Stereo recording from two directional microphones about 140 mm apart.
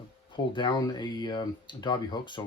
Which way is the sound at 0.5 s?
30° left (ahead or behind).